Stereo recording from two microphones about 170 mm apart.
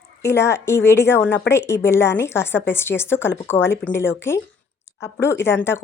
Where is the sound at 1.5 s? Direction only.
15° left (ahead or behind).